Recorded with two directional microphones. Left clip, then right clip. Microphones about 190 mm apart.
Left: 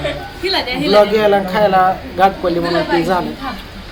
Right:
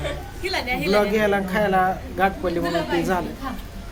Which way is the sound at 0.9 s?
5° right (ahead or behind).